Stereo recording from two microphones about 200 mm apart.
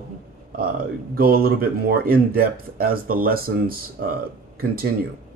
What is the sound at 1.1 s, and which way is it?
Speech, 50° right (ahead or behind).